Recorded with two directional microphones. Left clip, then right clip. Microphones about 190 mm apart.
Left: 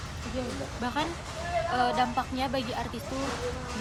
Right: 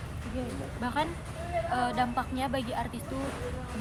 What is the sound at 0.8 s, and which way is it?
Speech, 10° right (ahead or behind).